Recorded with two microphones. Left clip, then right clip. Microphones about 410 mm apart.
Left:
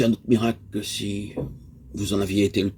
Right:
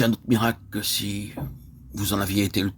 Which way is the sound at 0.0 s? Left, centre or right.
Right.